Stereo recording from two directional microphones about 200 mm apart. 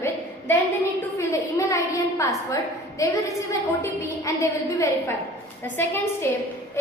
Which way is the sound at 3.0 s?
15° left (ahead or behind).